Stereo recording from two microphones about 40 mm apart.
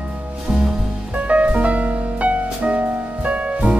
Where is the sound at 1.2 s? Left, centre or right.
Right.